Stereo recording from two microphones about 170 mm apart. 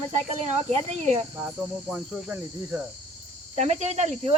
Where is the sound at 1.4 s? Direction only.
5° right (ahead or behind).